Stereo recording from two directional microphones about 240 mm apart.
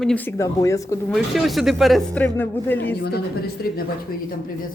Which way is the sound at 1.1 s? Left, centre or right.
Centre.